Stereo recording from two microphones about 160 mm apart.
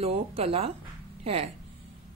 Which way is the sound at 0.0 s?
40° right (ahead or behind).